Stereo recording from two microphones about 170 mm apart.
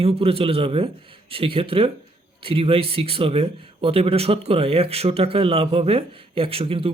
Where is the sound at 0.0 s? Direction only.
35° right (ahead or behind).